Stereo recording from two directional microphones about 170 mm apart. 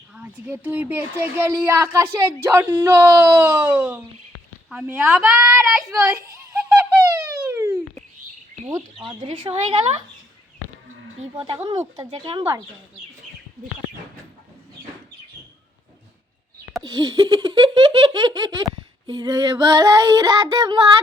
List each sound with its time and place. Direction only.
0.1 s speech: 10° right (ahead or behind)
6.7 s a sound: 5° right (ahead or behind)
9.2 s laughter: 30° right (ahead or behind)
11.3 s laughter: 30° right (ahead or behind)
16.8 s laughter: 20° right (ahead or behind)